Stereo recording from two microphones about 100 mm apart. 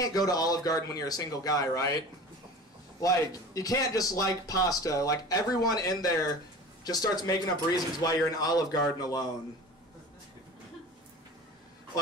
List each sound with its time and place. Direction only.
0.0 s speech: 40° left (ahead or behind)